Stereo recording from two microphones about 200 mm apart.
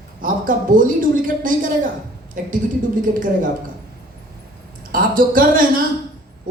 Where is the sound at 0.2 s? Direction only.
45° right (ahead or behind).